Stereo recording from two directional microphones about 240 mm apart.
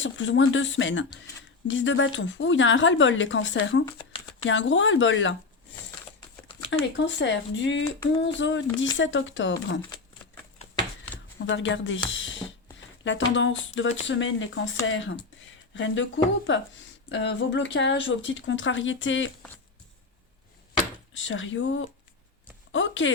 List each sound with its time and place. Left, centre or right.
0.0 s speech: left
6.7 s speech: left
7.9 s a sound: centre
8.2 s speech: left
11.4 s speech: left
21.1 s speech: left